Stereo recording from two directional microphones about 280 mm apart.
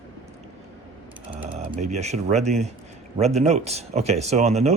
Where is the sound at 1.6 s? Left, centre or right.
Right.